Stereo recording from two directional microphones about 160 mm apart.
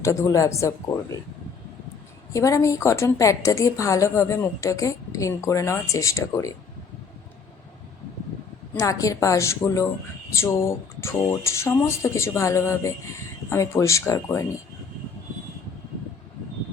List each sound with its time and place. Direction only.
0.0 s a woman's voice: 20° left (ahead or behind)
2.3 s a woman's voice: 20° left (ahead or behind)
8.8 s a woman's voice: 20° left (ahead or behind)